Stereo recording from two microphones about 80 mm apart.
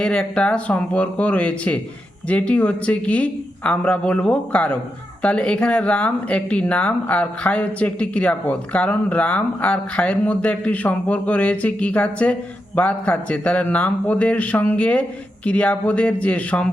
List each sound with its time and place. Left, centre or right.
0.0 s speech: centre